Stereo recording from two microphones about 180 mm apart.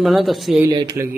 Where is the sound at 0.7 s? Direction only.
20° right (ahead or behind).